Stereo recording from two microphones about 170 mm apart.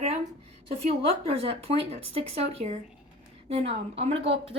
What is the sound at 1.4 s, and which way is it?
Speech, 35° right (ahead or behind).